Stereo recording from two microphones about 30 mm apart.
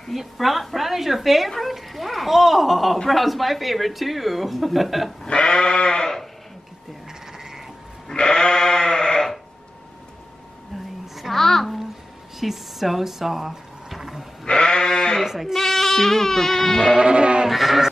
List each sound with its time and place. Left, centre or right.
0.1 s speech: centre
5.2 s sheep: left
7.3 s frog: centre
8.1 s sheep: left
11.3 s a sound: centre
12.4 s a sound: centre
14.4 s sheep: left
15.2 s speech: centre
15.5 s speech: centre
16.8 s sheep: right
17.5 s speech: centre